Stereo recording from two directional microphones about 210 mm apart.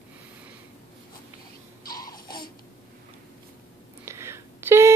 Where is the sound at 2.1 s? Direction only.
20° left (ahead or behind).